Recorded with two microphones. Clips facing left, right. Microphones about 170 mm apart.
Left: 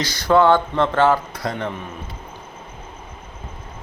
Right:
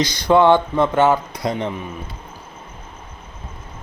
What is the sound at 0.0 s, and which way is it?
Speech, 15° right (ahead or behind).